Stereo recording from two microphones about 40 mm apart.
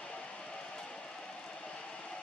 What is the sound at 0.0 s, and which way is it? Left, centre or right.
Music, left.